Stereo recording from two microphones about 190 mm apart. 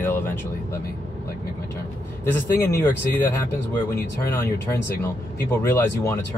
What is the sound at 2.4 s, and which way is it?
Speech, 10° left (ahead or behind).